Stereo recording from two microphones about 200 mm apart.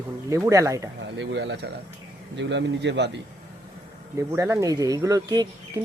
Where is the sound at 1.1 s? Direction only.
65° right (ahead or behind).